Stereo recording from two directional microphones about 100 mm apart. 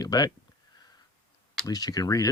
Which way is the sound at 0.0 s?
40° left (ahead or behind).